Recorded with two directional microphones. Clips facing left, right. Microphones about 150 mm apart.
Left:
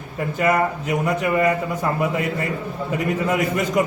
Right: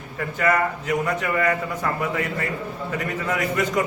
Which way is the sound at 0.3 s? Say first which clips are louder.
Left 2 dB; 15° left (ahead or behind).